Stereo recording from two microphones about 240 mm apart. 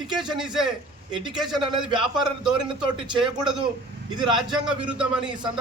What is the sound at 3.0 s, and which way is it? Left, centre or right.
Speech, centre.